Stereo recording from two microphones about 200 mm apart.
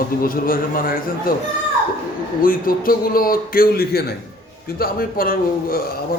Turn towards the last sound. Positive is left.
turn(degrees=45)  # may be behind; listen again after turning